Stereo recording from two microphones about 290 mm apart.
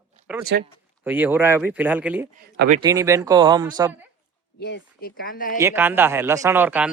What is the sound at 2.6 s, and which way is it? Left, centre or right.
Speech, right.